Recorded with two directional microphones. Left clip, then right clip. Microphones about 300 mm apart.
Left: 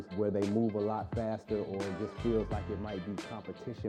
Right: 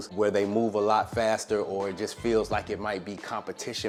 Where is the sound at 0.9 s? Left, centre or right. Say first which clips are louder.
Right 12 dB; centre.